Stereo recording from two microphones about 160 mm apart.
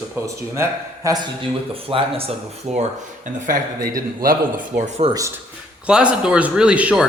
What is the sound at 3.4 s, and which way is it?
A man's voice, 60° right (ahead or behind).